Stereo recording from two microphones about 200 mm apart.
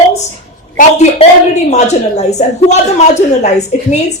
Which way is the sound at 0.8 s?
35° left (ahead or behind).